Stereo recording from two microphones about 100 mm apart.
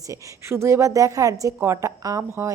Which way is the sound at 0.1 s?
25° right (ahead or behind).